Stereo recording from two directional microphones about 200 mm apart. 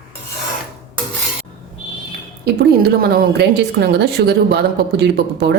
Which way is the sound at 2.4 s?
50° right (ahead or behind).